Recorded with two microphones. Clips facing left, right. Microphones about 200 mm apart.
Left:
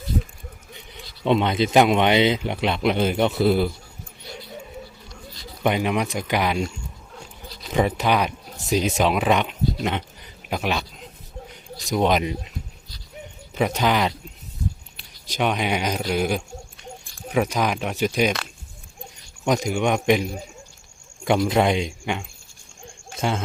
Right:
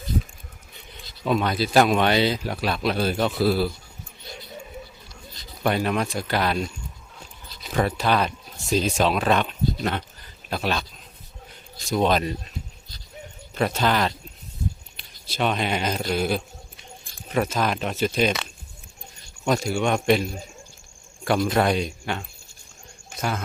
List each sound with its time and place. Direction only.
1.2 s speech: 25° left (ahead or behind)
5.6 s speech: 15° left (ahead or behind)
7.7 s speech: 15° left (ahead or behind)
11.9 s speech: 15° left (ahead or behind)
13.5 s speech: 15° left (ahead or behind)
15.3 s speech: 15° left (ahead or behind)
19.5 s a man's voice: 20° left (ahead or behind)